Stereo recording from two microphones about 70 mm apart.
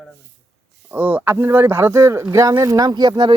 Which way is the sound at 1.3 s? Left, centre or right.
Right.